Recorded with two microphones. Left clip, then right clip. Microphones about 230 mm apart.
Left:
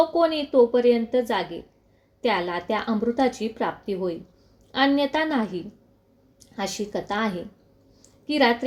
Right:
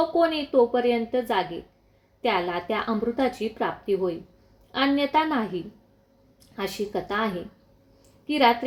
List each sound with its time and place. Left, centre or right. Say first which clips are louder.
0.2 s a woman's voice: right 1 dB; left